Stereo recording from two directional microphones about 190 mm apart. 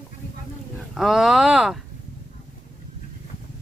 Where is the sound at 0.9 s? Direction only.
Centre (ahead or behind).